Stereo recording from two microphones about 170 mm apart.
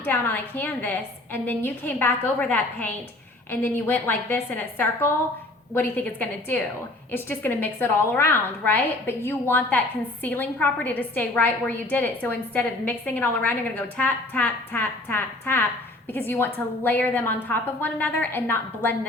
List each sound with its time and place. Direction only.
0.0 s a woman's voice: 10° left (ahead or behind)